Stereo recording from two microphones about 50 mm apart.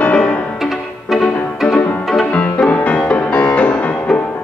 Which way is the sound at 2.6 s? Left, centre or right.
Left.